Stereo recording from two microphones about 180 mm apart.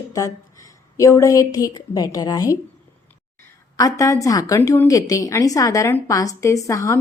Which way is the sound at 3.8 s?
15° left (ahead or behind).